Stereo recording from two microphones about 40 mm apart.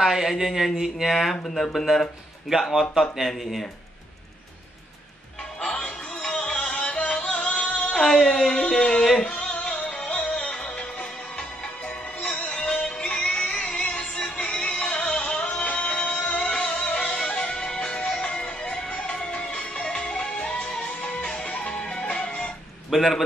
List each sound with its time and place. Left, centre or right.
0.0 s speech: centre
1.1 s speech: centre
2.8 s speech: centre
5.6 s music: left
6.9 s music: left
7.9 s speech: centre
8.5 s a sound: centre
9.2 s music: left
22.8 s a man's voice: centre